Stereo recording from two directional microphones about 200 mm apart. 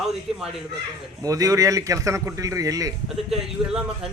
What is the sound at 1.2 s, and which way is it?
A man's voice, 15° right (ahead or behind).